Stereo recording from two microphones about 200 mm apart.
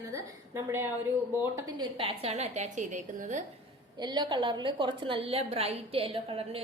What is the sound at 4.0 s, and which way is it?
A woman's voice, 20° right (ahead or behind).